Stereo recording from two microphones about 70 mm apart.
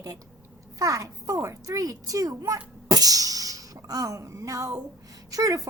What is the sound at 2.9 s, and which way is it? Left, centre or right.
Music, right.